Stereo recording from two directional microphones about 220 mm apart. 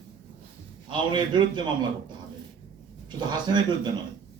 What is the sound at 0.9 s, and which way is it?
Speech, 20° right (ahead or behind).